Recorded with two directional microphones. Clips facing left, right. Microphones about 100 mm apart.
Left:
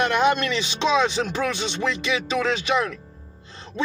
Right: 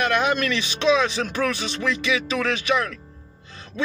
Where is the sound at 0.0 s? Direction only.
25° left (ahead or behind).